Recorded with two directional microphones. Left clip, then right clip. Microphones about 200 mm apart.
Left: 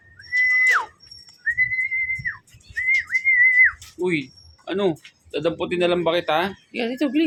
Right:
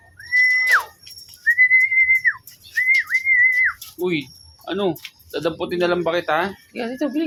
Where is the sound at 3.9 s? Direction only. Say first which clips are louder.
Even; centre (ahead or behind).